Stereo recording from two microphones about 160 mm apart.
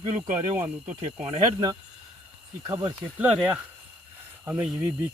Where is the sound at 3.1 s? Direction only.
10° right (ahead or behind).